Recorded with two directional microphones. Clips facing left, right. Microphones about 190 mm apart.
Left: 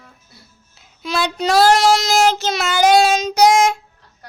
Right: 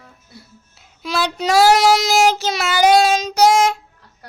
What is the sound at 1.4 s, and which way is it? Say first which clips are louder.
Child singing: even; 10° right (ahead or behind).